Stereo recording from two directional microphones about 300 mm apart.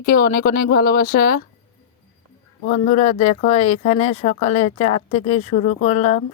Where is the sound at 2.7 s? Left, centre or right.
Left.